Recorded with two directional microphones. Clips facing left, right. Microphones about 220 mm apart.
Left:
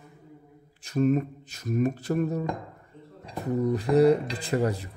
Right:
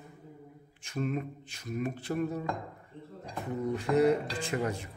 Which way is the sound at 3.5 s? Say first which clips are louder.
Left 6 dB; 40° left (ahead or behind).